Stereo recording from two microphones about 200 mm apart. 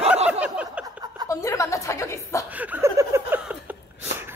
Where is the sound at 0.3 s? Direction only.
5° right (ahead or behind).